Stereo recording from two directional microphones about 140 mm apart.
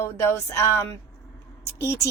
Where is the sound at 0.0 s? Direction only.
15° left (ahead or behind).